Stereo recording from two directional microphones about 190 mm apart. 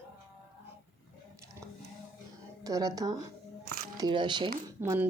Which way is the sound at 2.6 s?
20° right (ahead or behind).